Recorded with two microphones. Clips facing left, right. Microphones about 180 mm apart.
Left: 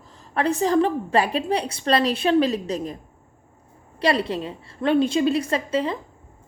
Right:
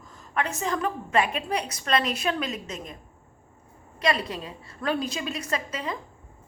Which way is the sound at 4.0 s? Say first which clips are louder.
Left 5 dB; 30° left (ahead or behind).